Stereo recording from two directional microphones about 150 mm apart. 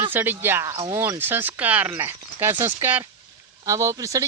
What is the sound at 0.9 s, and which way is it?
Speech, 20° right (ahead or behind).